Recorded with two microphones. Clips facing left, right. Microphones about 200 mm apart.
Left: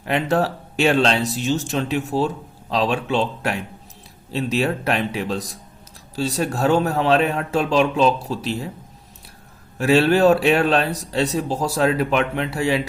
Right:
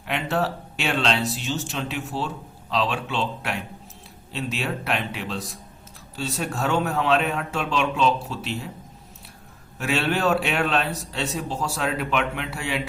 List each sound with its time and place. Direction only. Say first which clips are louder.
0.1 s speech: left 5 dB; 40° left (ahead or behind)
9.7 s speech: left 9 dB; 35° left (ahead or behind)